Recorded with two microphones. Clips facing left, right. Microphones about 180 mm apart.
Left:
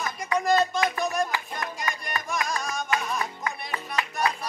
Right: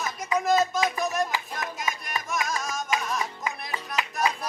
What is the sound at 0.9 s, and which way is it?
Music, centre (ahead or behind).